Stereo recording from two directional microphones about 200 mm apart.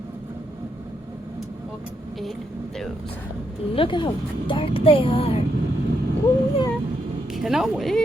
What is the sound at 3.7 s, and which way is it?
Child singing, 25° left (ahead or behind).